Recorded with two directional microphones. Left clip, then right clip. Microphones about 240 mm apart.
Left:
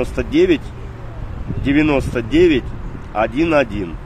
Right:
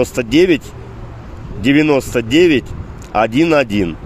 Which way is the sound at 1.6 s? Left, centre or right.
Right.